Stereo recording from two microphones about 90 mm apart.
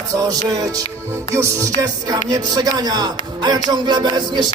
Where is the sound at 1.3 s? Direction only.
40° right (ahead or behind).